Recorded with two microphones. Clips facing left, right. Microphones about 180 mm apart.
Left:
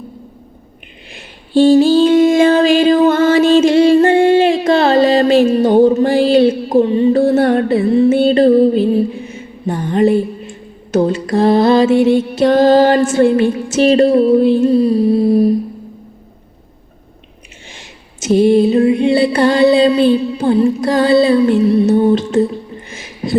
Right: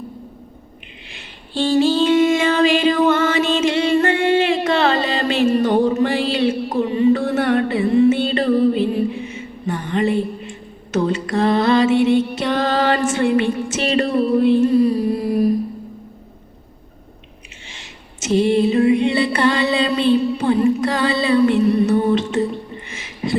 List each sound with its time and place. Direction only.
1.1 s mantra: 40° left (ahead or behind)
3.1 s music: 35° left (ahead or behind)
4.6 s carnatic music: 40° left (ahead or behind)
5.8 s music: 35° left (ahead or behind)
13.4 s music: centre (ahead or behind)
13.7 s music: 35° left (ahead or behind)
14.1 s music: centre (ahead or behind)
14.4 s humming: 30° left (ahead or behind)
18.3 s music: 40° left (ahead or behind)
20.1 s music: centre (ahead or behind)
20.4 s music: 35° left (ahead or behind)
21.3 s music: centre (ahead or behind)
21.7 s music: 35° left (ahead or behind)
22.9 s a sound: 40° left (ahead or behind)